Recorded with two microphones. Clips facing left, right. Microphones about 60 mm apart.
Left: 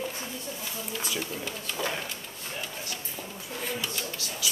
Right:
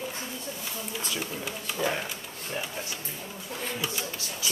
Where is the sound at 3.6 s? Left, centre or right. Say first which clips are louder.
Right 1 dB; centre.